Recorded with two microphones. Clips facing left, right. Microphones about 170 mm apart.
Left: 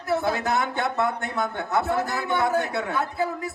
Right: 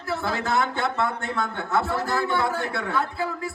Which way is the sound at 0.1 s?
20° left (ahead or behind).